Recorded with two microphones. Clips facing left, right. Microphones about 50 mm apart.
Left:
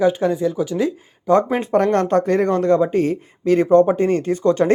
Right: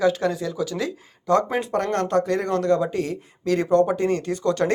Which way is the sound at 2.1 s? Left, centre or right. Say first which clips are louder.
Left 5 dB; left.